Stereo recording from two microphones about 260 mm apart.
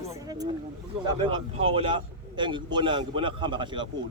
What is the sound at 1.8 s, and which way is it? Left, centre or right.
A man's voice, centre.